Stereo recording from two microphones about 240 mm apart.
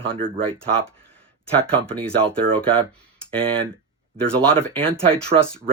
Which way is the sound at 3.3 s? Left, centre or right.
Right.